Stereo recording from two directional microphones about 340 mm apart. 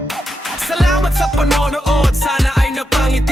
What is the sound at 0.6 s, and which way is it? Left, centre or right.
Music, centre.